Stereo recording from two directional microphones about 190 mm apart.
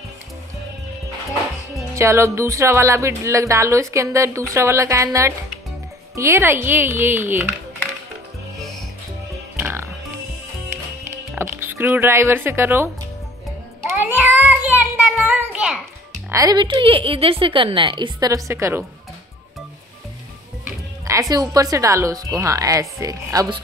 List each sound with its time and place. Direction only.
2.0 s speech: 15° right (ahead or behind)
8.5 s music: centre (ahead or behind)
9.6 s music: 10° right (ahead or behind)
11.3 s speech: 10° right (ahead or behind)
13.8 s a sound: 10° right (ahead or behind)
16.3 s a woman's voice: 20° right (ahead or behind)
20.6 s speech: 15° right (ahead or behind)